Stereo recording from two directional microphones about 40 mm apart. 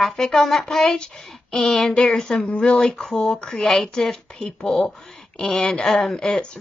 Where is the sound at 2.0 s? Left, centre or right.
Left.